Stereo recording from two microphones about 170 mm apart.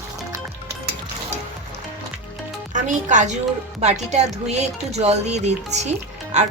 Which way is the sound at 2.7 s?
45° right (ahead or behind).